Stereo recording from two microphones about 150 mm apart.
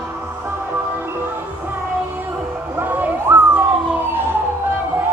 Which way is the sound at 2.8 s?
15° right (ahead or behind).